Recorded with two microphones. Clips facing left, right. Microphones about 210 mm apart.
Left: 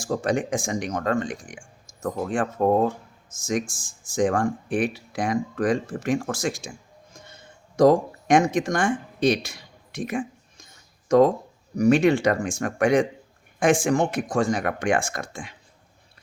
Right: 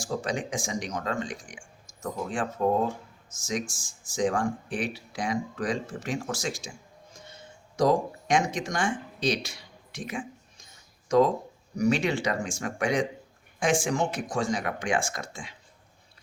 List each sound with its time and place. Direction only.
0.0 s speech: 55° left (ahead or behind)
11.8 s speech: 55° left (ahead or behind)